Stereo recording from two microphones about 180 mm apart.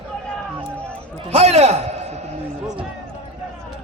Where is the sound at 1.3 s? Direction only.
35° right (ahead or behind).